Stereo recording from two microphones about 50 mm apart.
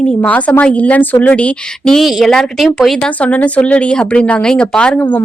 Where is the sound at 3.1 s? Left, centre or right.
Left.